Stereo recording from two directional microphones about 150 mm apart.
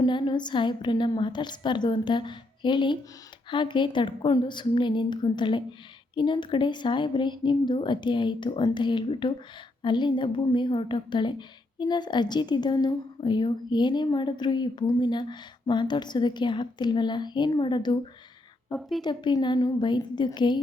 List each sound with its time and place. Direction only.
0.0 s a woman's voice: 30° left (ahead or behind)
18.8 s speech: centre (ahead or behind)
19.0 s a woman's voice: 30° left (ahead or behind)